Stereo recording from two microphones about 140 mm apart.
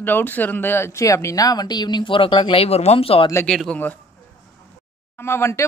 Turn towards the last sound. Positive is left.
turn(degrees=20)  # may be behind; listen again after turning